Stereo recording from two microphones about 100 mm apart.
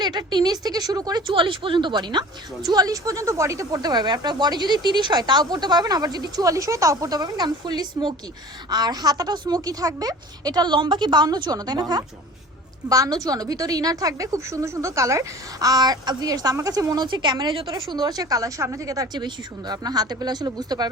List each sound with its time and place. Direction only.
0.0 s a woman's voice: 45° right (ahead or behind)
1.3 s a woman's voice: 60° right (ahead or behind); by 20.9 s 40° right (ahead or behind)